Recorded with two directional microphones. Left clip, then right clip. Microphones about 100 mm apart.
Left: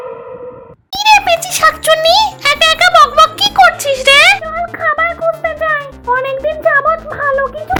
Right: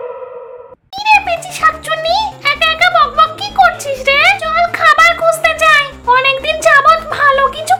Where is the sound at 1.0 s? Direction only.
55° left (ahead or behind).